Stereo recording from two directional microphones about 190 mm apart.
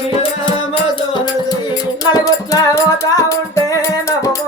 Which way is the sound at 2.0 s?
20° left (ahead or behind).